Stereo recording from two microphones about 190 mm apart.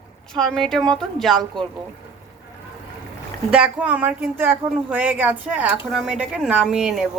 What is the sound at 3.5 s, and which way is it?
A woman's voice, 5° right (ahead or behind).